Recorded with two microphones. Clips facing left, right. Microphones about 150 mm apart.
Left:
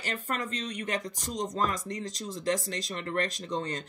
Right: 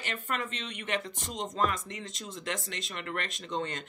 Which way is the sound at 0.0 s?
35° left (ahead or behind).